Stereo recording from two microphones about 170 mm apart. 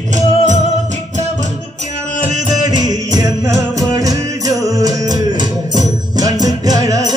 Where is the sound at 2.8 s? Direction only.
20° right (ahead or behind).